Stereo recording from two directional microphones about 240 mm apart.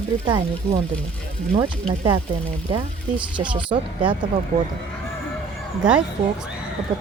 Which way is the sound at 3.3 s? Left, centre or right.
Centre.